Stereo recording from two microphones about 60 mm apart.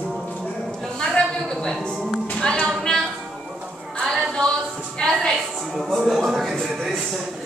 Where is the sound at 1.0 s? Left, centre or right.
Centre.